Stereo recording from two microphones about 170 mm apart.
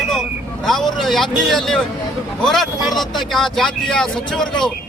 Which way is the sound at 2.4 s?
Centre (ahead or behind).